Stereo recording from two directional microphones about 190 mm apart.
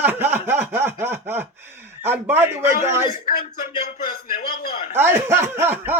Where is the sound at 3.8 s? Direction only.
45° left (ahead or behind).